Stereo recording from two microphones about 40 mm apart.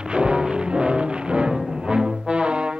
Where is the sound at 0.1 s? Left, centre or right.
Right.